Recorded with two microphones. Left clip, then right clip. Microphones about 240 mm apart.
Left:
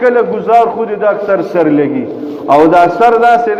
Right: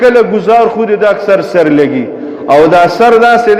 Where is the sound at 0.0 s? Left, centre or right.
Right.